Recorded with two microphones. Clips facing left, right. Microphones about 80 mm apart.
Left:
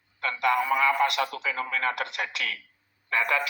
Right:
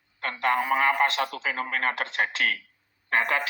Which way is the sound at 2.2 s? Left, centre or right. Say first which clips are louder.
Right 5 dB; right.